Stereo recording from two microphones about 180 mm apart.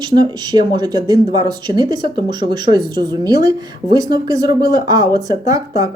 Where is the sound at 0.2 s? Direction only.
25° right (ahead or behind).